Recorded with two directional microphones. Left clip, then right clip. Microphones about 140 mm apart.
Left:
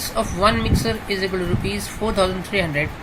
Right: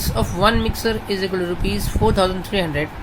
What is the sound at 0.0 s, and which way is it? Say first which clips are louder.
Speech: right 1 dB; 50° right (ahead or behind).